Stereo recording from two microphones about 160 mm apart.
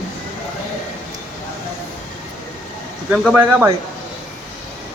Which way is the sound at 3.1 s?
Centre (ahead or behind).